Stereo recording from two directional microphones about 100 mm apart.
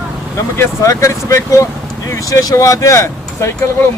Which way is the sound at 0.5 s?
30° left (ahead or behind).